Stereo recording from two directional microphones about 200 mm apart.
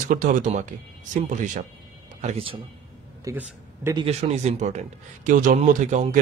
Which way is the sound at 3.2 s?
10° right (ahead or behind).